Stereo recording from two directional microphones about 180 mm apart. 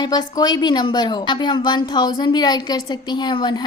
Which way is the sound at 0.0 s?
20° left (ahead or behind).